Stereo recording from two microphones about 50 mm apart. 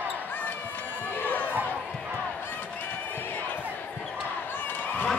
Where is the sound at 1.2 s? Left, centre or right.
Left.